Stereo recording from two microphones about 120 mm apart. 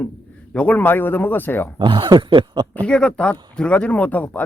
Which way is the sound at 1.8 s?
45° right (ahead or behind).